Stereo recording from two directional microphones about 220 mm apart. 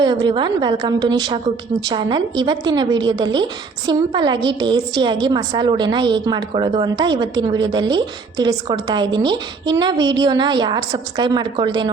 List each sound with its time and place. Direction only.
0.0 s a woman's voice: 20° right (ahead or behind)